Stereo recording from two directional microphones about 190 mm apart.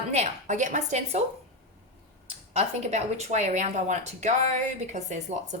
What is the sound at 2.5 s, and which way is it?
A woman's voice, 35° right (ahead or behind).